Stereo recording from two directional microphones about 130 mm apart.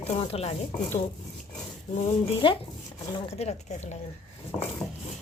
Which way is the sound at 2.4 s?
40° left (ahead or behind).